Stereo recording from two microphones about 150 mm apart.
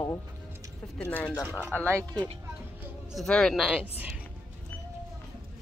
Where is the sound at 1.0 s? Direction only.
10° left (ahead or behind).